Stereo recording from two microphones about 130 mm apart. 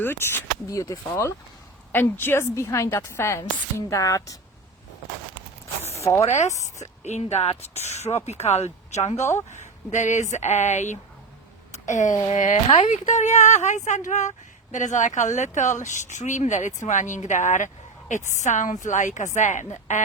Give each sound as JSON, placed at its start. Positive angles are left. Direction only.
{"t": 0.0, "sound": "a woman's voice", "side_deg": 15}
{"t": 5.8, "sound": "zipper", "side_deg": 20}
{"t": 6.2, "sound": "speech", "side_deg": 65}
{"t": 11.7, "sound": "a sound", "side_deg": 70}
{"t": 12.3, "sound": "speech", "side_deg": 70}